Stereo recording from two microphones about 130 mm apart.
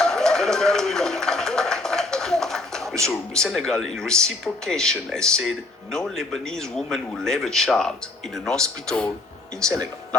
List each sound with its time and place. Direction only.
0.0 s a sound: 5° left (ahead or behind)
3.1 s speech: 5° left (ahead or behind)
9.6 s speech: 30° right (ahead or behind)